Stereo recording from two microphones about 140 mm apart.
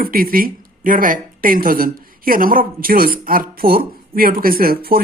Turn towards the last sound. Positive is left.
turn(degrees=-90)